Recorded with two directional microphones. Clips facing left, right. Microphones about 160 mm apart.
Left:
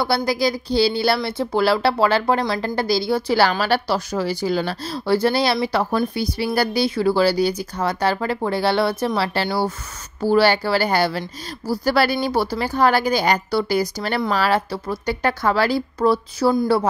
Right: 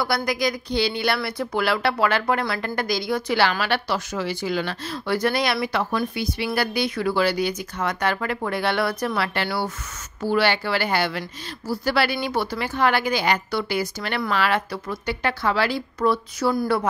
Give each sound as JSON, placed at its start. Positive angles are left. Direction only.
{"t": 0.0, "sound": "speech", "side_deg": 30}